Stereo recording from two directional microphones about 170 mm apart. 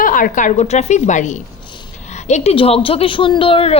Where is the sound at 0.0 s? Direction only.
50° left (ahead or behind).